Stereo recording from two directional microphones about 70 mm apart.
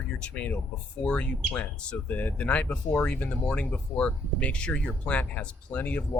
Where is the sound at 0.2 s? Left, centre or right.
Centre.